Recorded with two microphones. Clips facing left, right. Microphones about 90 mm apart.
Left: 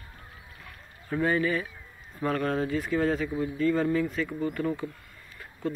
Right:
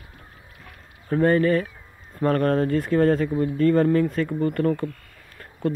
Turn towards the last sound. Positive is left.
turn(degrees=-60)  # may be behind; listen again after turning